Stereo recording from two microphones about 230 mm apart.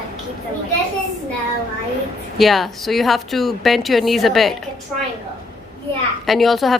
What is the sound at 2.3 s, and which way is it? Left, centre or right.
A woman's voice, centre.